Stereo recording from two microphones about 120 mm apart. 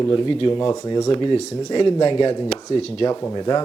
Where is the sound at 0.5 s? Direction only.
35° left (ahead or behind).